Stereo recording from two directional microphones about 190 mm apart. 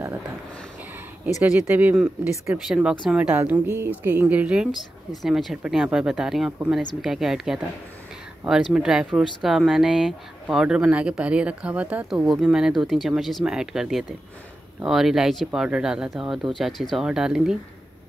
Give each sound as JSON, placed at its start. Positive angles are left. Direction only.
{"t": 1.4, "sound": "speech", "side_deg": -10}
{"t": 8.7, "sound": "speech", "side_deg": -5}